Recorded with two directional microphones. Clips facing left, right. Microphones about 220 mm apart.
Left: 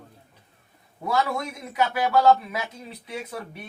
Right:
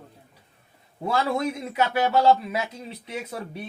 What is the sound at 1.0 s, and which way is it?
A man's voice, 30° right (ahead or behind).